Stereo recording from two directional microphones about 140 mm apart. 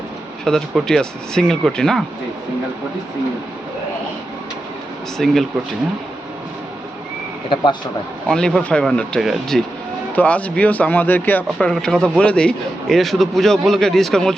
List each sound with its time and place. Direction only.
0.4 s a man's voice: 5° left (ahead or behind)
5.1 s a man's voice: centre (ahead or behind)
7.5 s speech: 35° left (ahead or behind)
8.3 s a man's voice: 5° left (ahead or behind)